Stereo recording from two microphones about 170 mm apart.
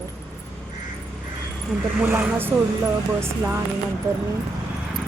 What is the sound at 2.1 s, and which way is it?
Speech, 10° right (ahead or behind).